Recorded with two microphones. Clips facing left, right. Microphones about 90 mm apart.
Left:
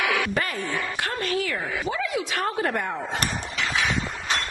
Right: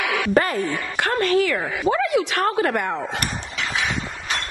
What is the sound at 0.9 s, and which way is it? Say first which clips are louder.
Speech: right 12 dB; 65° right (ahead or behind).